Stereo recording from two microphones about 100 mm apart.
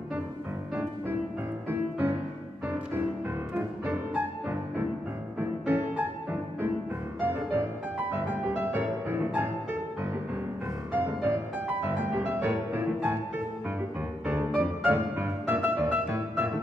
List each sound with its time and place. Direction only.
1.7 s music: 20° right (ahead or behind)
3.5 s music: 20° right (ahead or behind)
7.2 s music: 20° right (ahead or behind)
10.9 s music: 20° right (ahead or behind)
14.2 s music: 20° right (ahead or behind)